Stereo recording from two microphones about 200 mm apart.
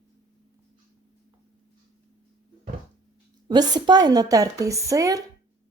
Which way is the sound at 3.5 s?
20° right (ahead or behind).